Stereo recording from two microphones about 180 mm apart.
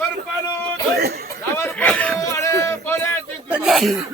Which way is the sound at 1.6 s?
10° left (ahead or behind).